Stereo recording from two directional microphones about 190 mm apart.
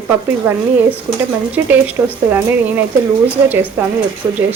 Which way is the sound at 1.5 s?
10° right (ahead or behind).